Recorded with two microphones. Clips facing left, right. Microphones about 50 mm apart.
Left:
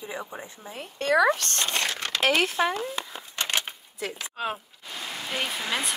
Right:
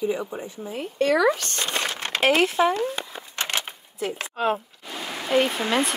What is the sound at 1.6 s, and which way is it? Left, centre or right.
Crumpling, right.